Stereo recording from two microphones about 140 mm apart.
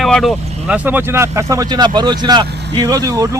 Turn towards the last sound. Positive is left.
turn(degrees=-25)  # may be behind; listen again after turning